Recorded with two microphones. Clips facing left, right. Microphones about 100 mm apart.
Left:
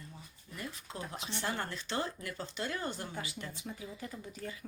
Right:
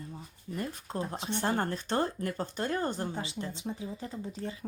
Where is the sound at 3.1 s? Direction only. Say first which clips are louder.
Right 5 dB; 25° right (ahead or behind).